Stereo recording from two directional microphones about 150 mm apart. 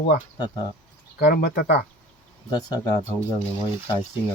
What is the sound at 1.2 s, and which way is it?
Speech, 75° left (ahead or behind).